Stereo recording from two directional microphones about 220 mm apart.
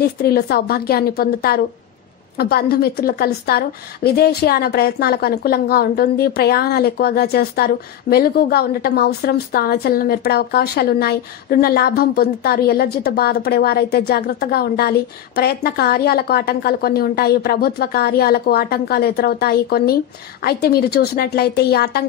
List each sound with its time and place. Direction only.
0.0 s a woman's voice: 45° left (ahead or behind)